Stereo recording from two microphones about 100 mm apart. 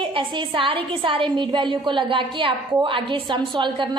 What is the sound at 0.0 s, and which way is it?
A woman's voice, 55° right (ahead or behind).